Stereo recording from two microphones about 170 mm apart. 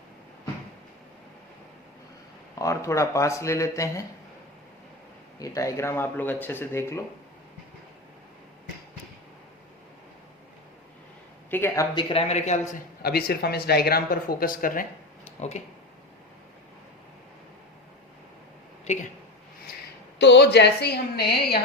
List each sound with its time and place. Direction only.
2.6 s speech: 20° left (ahead or behind)
5.4 s speech: 20° left (ahead or behind)
11.5 s speech: 15° left (ahead or behind)
11.9 s speech: 35° left (ahead or behind)
13.0 s speech: 65° left (ahead or behind)
15.4 s speech: 40° left (ahead or behind)
20.1 s a woman's voice: 90° left; by 21.6 s 70° left (ahead or behind)